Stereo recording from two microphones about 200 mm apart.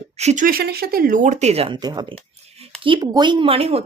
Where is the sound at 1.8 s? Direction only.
20° right (ahead or behind).